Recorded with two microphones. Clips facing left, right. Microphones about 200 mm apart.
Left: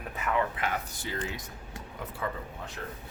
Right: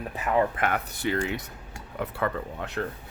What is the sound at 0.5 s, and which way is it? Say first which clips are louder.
Speech: right 5 dB; 60° right (ahead or behind).